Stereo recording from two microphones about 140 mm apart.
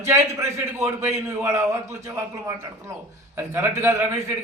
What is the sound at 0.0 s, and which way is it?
A man's voice, 20° right (ahead or behind).